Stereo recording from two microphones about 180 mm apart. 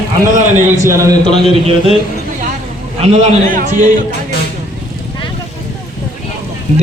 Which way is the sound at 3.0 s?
40° right (ahead or behind).